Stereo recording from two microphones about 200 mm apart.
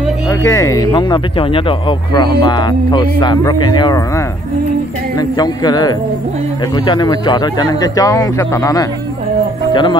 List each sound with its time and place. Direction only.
0.3 s speech: 15° left (ahead or behind)
5.4 s speech: 20° left (ahead or behind)